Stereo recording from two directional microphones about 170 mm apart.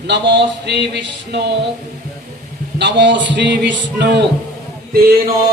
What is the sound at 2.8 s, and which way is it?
Music, 90° right.